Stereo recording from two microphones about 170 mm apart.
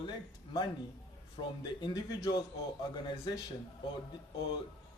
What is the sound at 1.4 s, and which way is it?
Speech, 25° left (ahead or behind).